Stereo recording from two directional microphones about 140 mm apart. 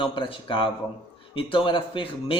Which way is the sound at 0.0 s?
35° left (ahead or behind).